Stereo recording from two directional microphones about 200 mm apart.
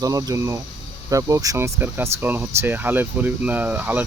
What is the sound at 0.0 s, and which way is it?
Speech, 20° right (ahead or behind).